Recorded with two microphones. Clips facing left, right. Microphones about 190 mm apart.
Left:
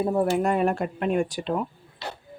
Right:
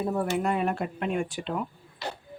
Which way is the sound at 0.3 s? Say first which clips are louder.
Left 4 dB; 45° left (ahead or behind).